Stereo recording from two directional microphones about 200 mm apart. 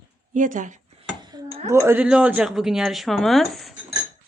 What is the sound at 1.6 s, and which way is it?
Speech, 15° right (ahead or behind).